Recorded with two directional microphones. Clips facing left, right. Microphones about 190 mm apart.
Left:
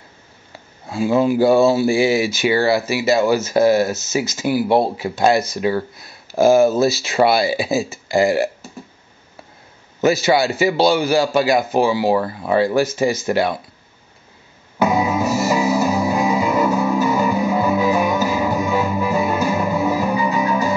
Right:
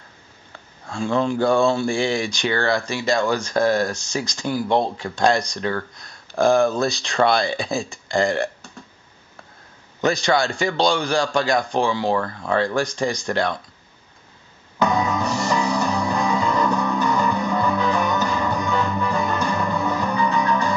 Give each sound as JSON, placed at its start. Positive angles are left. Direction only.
{"t": 0.9, "sound": "speech", "side_deg": 5}
{"t": 10.0, "sound": "speech", "side_deg": 5}
{"t": 14.8, "sound": "music", "side_deg": 5}